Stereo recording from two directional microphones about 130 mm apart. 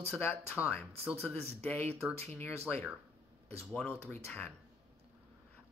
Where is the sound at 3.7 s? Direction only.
15° left (ahead or behind).